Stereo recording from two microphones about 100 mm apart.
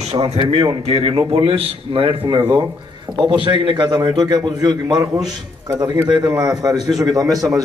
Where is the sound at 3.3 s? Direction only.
50° right (ahead or behind).